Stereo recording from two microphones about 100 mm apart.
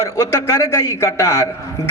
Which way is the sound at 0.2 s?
30° left (ahead or behind).